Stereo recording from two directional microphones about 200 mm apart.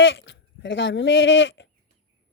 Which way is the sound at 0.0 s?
70° left (ahead or behind).